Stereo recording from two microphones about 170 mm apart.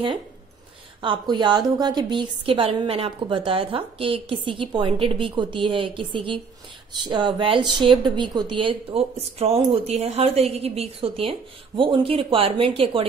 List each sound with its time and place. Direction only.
1.0 s speech: 25° right (ahead or behind)